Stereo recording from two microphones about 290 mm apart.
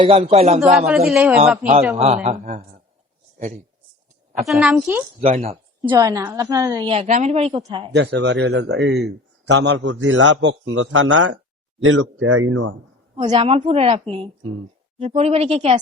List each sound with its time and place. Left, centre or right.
0.0 s a woman's voice: centre
0.6 s a man's voice: centre
2.2 s a woman's voice: right
4.4 s a man's voice: centre
5.2 s speech: right
5.9 s a woman's voice: centre
7.9 s a man's voice: right
13.1 s a woman's voice: centre